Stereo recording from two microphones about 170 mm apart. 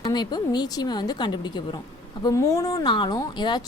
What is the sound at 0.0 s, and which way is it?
Speech, 25° left (ahead or behind).